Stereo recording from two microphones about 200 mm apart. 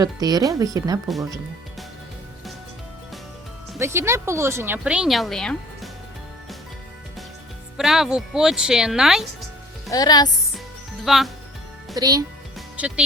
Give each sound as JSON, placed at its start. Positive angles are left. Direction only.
{"t": 0.0, "sound": "speech", "side_deg": -20}
{"t": 3.8, "sound": "speech", "side_deg": -15}
{"t": 7.8, "sound": "speech", "side_deg": 0}
{"t": 9.9, "sound": "speech", "side_deg": 20}
{"t": 11.0, "sound": "speech", "side_deg": 0}
{"t": 11.9, "sound": "speech", "side_deg": -20}
{"t": 12.5, "sound": "music", "side_deg": -5}